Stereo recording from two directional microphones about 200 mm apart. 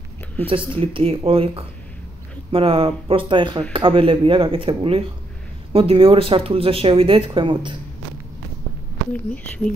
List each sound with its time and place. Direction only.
0.7 s speech: 25° right (ahead or behind)
9.1 s speech: 5° left (ahead or behind)